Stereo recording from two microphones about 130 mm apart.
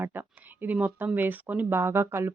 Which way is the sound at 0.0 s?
15° right (ahead or behind).